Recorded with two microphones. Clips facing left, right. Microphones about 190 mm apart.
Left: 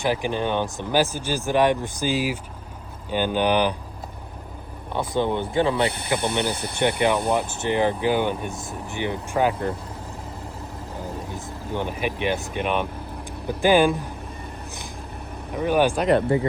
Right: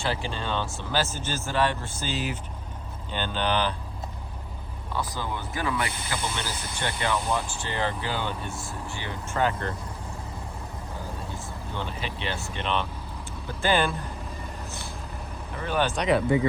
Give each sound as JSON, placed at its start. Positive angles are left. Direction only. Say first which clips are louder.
{"t": 0.0, "sound": "speech", "louder": "left 7 dB", "side_deg": 15}
{"t": 4.9, "sound": "speech", "louder": "left 8 dB", "side_deg": 25}
{"t": 6.1, "sound": "speech", "louder": "left 8 dB", "side_deg": 60}
{"t": 7.4, "sound": "speech", "louder": "left 8 dB", "side_deg": 20}
{"t": 11.3, "sound": "speech", "louder": "left 6 dB", "side_deg": 15}
{"t": 15.5, "sound": "speech", "louder": "left 7 dB", "side_deg": 10}